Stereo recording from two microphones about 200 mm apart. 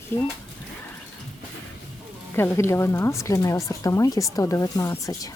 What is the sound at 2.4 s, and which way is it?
Speech, 10° left (ahead or behind).